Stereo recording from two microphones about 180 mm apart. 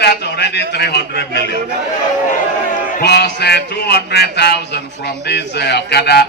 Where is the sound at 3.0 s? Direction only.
65° left (ahead or behind).